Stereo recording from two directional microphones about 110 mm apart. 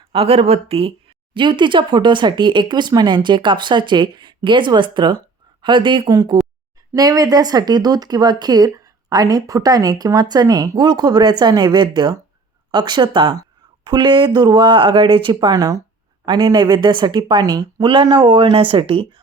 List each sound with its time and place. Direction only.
0.1 s speech: 60° right (ahead or behind); by 15.8 s 35° right (ahead or behind)
16.2 s speech: 45° right (ahead or behind)